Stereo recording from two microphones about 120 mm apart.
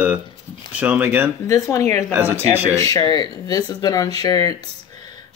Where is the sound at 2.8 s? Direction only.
30° left (ahead or behind).